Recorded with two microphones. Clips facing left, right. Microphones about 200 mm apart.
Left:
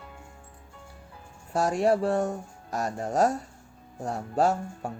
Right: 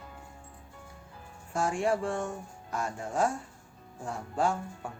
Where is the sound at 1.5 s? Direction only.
40° left (ahead or behind).